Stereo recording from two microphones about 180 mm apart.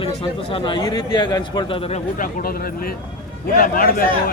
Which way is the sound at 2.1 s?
50° left (ahead or behind).